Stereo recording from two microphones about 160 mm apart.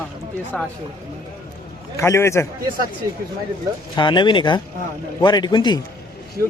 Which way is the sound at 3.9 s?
30° left (ahead or behind).